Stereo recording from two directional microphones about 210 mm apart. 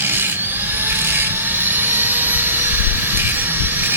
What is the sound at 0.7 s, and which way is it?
Vehicle, 10° right (ahead or behind).